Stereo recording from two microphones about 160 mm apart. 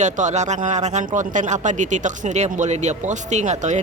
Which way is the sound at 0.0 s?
50° right (ahead or behind).